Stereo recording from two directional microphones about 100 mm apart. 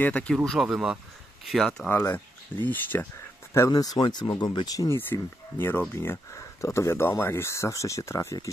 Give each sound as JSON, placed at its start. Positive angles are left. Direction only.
{"t": 0.0, "sound": "speech", "side_deg": 15}
{"t": 0.5, "sound": "speech", "side_deg": -5}
{"t": 1.9, "sound": "speech", "side_deg": 20}
{"t": 3.5, "sound": "speech", "side_deg": 35}
{"t": 4.7, "sound": "speech", "side_deg": 25}